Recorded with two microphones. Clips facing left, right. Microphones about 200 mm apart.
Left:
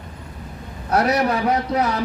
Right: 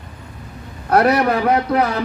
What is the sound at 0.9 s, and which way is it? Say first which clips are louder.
Speech: right 4 dB; 60° right (ahead or behind).